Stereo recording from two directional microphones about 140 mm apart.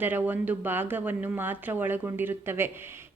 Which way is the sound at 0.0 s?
15° right (ahead or behind).